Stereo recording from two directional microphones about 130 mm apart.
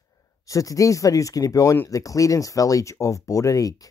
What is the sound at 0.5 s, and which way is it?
Speech, 25° left (ahead or behind).